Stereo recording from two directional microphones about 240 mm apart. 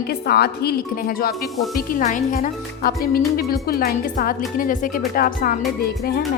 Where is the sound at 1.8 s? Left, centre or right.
Left.